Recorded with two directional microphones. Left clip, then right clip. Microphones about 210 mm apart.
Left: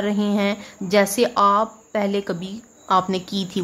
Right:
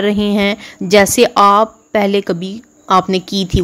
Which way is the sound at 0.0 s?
30° right (ahead or behind).